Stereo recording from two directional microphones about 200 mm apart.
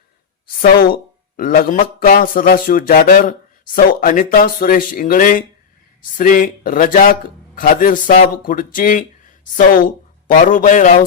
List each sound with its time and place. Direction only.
1.4 s a man's voice: 45° left (ahead or behind)